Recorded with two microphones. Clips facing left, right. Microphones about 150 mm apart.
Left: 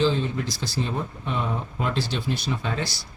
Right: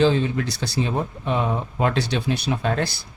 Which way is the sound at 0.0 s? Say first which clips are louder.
Right 4 dB; 65° right (ahead or behind).